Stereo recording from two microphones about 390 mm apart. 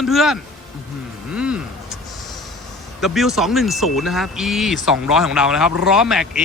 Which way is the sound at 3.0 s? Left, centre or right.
Centre.